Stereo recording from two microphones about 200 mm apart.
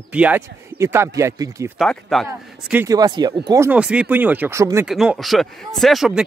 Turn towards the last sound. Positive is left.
turn(degrees=0)  # may be behind; listen again after turning